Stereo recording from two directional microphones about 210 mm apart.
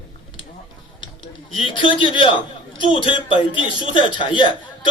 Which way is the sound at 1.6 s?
25° left (ahead or behind).